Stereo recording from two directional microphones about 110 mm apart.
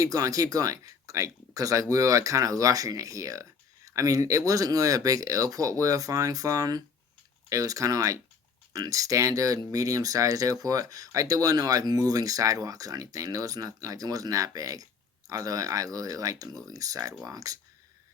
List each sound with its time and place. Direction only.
0.0 s speech: 30° right (ahead or behind)